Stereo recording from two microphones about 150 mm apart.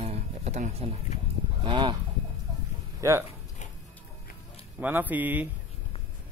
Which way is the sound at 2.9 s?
20° right (ahead or behind).